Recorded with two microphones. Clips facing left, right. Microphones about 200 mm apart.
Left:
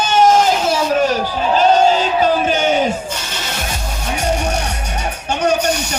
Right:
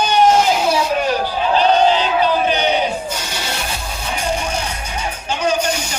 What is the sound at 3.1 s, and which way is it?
Music, 10° right (ahead or behind).